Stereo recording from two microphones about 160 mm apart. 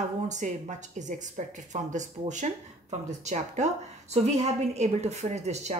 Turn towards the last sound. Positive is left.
turn(degrees=-45)  # may be behind; listen again after turning